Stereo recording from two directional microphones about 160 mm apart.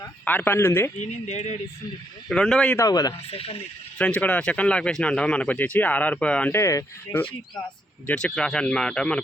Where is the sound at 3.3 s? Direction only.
35° left (ahead or behind).